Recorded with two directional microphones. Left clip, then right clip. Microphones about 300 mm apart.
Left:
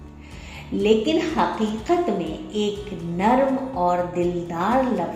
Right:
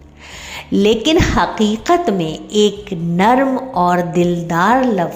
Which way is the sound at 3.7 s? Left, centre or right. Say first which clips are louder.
Right 8 dB; right.